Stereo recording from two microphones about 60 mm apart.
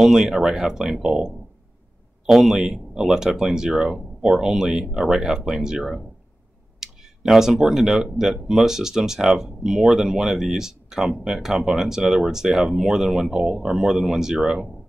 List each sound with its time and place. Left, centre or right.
0.0 s speech: centre